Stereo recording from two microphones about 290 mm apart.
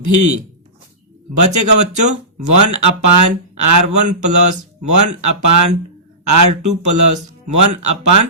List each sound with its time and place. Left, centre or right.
0.0 s speech: right
1.4 s speech: right